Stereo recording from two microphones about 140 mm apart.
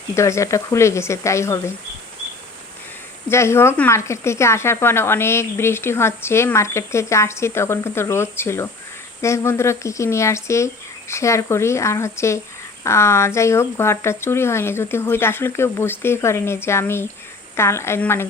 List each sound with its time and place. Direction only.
0.1 s speech: 20° left (ahead or behind)
3.2 s speech: 20° left (ahead or behind)